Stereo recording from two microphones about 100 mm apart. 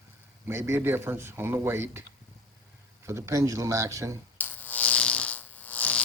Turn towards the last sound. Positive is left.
turn(degrees=15)  # may be behind; listen again after turning